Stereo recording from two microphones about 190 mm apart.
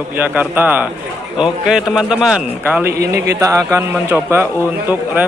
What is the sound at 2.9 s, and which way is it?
Speech, 55° right (ahead or behind).